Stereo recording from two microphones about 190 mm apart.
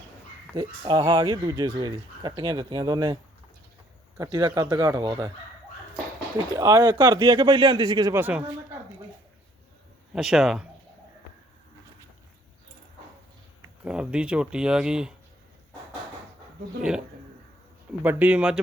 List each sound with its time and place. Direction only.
0.5 s speech: 25° right (ahead or behind)
4.2 s speech: 20° right (ahead or behind)
6.5 s speech: 20° right (ahead or behind)
10.1 s speech: centre (ahead or behind)
13.8 s speech: 5° right (ahead or behind)
18.0 s speech: 10° right (ahead or behind)